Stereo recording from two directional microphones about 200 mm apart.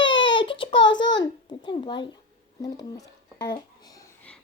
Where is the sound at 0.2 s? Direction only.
25° left (ahead or behind).